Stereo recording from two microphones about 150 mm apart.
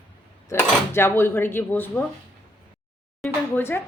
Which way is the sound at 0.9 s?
15° left (ahead or behind).